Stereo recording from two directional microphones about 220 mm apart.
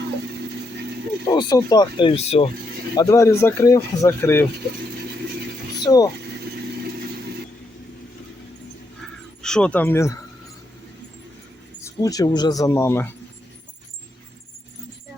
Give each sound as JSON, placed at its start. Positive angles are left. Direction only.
{"t": 1.3, "sound": "speech", "side_deg": 20}
{"t": 2.9, "sound": "speech", "side_deg": 15}
{"t": 5.8, "sound": "speech", "side_deg": 15}
{"t": 9.4, "sound": "speech", "side_deg": 5}
{"t": 11.8, "sound": "speech", "side_deg": 15}